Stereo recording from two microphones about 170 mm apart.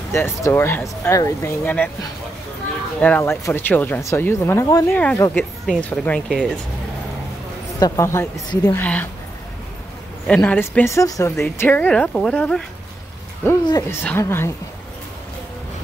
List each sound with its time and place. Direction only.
0.1 s speech: 15° left (ahead or behind)
3.0 s speech: 10° left (ahead or behind)
7.8 s speech: 20° left (ahead or behind)
8.8 s speech: 10° left (ahead or behind)
10.2 s speech: 5° left (ahead or behind)
13.7 s speech: 20° left (ahead or behind)